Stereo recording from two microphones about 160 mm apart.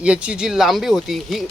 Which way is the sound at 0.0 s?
5° right (ahead or behind).